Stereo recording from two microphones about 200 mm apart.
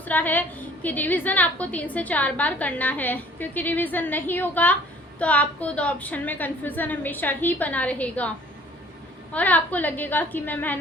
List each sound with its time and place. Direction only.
0.0 s a woman's voice: 10° left (ahead or behind)
9.3 s a woman's voice: 10° left (ahead or behind)